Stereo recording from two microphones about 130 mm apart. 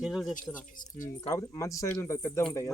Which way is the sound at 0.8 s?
90° left.